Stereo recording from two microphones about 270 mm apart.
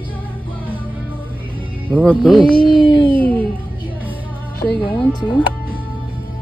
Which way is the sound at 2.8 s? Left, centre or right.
Centre.